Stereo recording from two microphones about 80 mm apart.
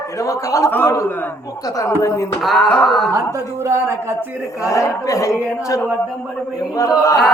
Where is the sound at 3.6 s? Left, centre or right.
Right.